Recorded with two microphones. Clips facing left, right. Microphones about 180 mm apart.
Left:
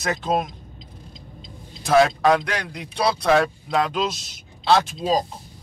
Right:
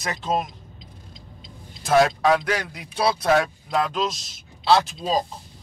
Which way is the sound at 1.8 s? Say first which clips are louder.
Left 1 dB; 5° right (ahead or behind).